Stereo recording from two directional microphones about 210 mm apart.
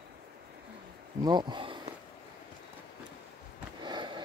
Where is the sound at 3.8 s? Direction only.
20° right (ahead or behind).